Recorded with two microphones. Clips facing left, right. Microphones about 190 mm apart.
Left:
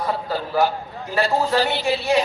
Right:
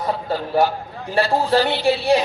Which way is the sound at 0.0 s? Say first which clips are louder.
Right 1 dB; 25° right (ahead or behind).